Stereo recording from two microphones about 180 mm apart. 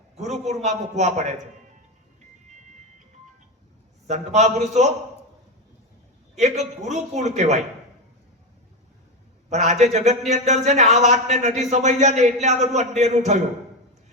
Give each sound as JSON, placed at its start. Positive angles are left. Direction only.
{"t": 0.2, "sound": "a man's voice", "side_deg": -40}
{"t": 4.0, "sound": "a man's voice", "side_deg": -40}
{"t": 6.3, "sound": "a man's voice", "side_deg": -40}
{"t": 9.5, "sound": "a man's voice", "side_deg": -40}